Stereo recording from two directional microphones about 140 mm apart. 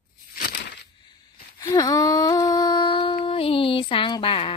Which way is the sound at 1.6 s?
25° left (ahead or behind).